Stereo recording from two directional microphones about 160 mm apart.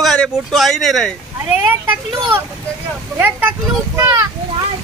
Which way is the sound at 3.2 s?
15° right (ahead or behind).